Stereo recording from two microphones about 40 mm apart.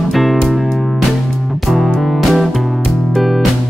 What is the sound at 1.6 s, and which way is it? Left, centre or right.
Music, centre.